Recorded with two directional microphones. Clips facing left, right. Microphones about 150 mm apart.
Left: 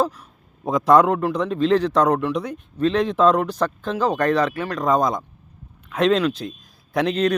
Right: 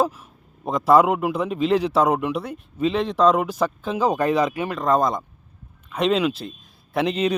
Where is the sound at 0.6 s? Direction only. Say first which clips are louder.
Left 1 dB; centre (ahead or behind).